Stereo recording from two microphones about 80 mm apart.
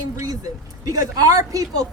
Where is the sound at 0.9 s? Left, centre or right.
Right.